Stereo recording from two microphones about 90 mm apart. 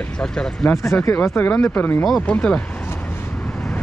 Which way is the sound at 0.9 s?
35° left (ahead or behind).